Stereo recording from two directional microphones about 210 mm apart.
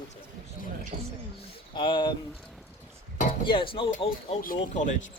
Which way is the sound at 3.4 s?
25° left (ahead or behind).